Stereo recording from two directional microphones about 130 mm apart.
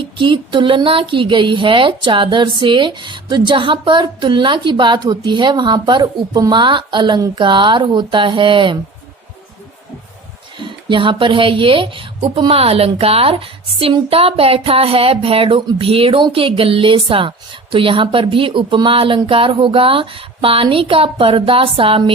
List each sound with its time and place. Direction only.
0.0 s speech: 40° right (ahead or behind)
10.6 s speech: 40° right (ahead or behind)